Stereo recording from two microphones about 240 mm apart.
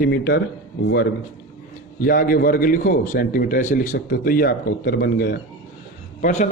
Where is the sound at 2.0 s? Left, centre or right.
Left.